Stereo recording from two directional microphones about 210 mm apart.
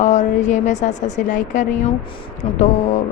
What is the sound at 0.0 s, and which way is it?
Speech, 35° left (ahead or behind).